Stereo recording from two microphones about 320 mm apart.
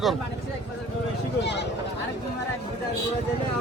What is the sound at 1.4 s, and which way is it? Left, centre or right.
Speech, left.